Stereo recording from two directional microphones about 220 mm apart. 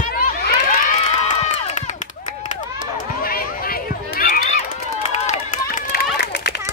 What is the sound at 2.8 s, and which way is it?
Run, 40° left (ahead or behind).